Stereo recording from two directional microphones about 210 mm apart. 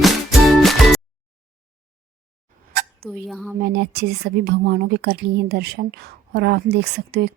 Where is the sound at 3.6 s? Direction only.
50° right (ahead or behind).